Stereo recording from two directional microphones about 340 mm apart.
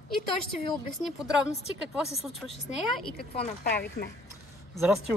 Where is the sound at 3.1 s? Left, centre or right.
Left.